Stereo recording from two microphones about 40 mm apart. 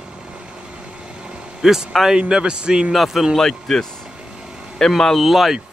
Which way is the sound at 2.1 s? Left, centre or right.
Right.